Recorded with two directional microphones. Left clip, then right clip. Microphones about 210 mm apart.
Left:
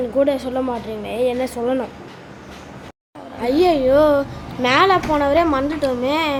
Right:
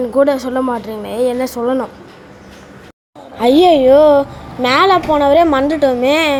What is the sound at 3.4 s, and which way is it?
A woman's voice, 25° right (ahead or behind).